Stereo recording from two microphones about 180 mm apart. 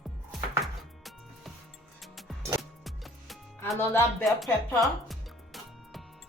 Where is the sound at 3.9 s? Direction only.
15° left (ahead or behind).